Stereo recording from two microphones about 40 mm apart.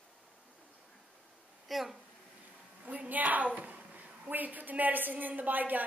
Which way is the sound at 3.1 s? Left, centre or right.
Right.